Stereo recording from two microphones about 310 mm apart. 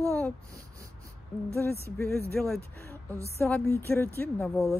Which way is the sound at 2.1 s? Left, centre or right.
Right.